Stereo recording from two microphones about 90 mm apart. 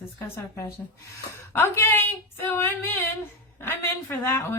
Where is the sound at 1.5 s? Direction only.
25° left (ahead or behind).